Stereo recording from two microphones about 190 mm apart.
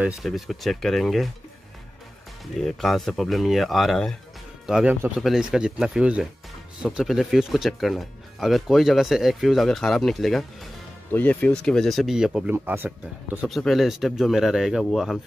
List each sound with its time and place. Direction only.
0.0 s speech: centre (ahead or behind)
2.6 s speech: centre (ahead or behind)